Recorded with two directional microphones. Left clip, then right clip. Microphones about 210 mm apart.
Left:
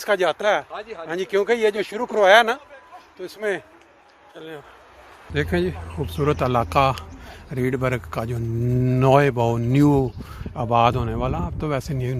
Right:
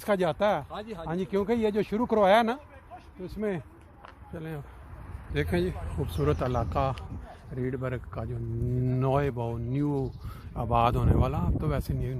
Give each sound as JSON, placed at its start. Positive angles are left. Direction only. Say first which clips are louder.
{"t": 0.0, "sound": "speech", "louder": "left 6 dB", "side_deg": 0}
{"t": 0.7, "sound": "speech", "louder": "left 5 dB", "side_deg": -45}
{"t": 1.0, "sound": "speech", "louder": "left 8 dB", "side_deg": 10}
{"t": 4.4, "sound": "speech", "louder": "left 4 dB", "side_deg": 0}
{"t": 10.5, "sound": "speech", "louder": "left 7 dB", "side_deg": 5}